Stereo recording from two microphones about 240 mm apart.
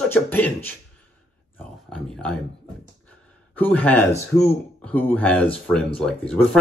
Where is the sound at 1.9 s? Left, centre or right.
Centre.